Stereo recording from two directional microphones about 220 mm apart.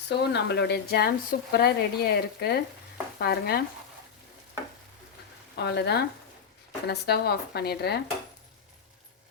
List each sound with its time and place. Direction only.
0.1 s speech: 50° left (ahead or behind)
5.5 s speech: 50° left (ahead or behind)